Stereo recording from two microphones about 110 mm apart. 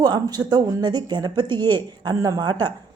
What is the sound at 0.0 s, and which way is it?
A woman's voice, 40° right (ahead or behind).